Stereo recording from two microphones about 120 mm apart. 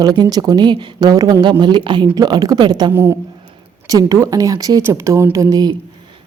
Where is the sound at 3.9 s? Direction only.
30° right (ahead or behind).